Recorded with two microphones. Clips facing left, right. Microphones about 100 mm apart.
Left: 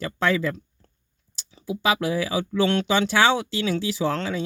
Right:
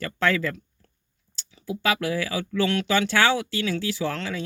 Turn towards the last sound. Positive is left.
turn(degrees=25)  # may be behind; listen again after turning